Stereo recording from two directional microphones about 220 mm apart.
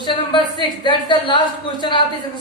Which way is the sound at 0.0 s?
20° left (ahead or behind).